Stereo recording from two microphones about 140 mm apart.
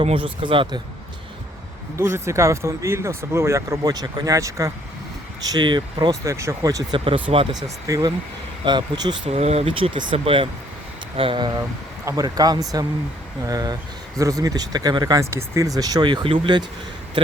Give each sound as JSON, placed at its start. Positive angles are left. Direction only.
{"t": 0.0, "sound": "speech", "side_deg": -40}
{"t": 2.0, "sound": "speech", "side_deg": -20}
{"t": 6.2, "sound": "speech", "side_deg": -20}
{"t": 7.0, "sound": "speech", "side_deg": -40}
{"t": 7.9, "sound": "speech", "side_deg": -25}
{"t": 9.3, "sound": "speech", "side_deg": -50}